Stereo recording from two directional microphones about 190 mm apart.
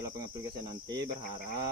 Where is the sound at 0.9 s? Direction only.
20° right (ahead or behind).